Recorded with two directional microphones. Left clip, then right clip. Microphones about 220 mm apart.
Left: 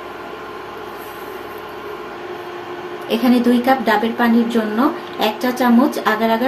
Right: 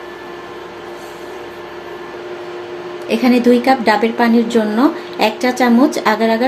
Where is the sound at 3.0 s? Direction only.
30° right (ahead or behind).